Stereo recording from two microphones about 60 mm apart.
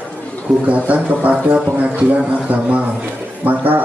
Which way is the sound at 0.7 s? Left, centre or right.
Right.